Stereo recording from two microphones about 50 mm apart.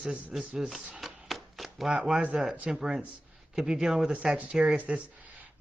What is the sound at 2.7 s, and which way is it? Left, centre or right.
Speech, centre.